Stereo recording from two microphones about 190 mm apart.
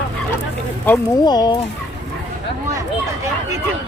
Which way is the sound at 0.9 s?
10° left (ahead or behind).